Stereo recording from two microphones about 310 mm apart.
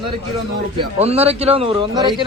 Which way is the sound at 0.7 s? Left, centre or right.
Centre.